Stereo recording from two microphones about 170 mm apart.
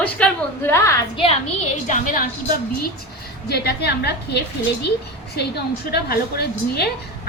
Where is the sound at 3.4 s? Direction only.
70° left (ahead or behind).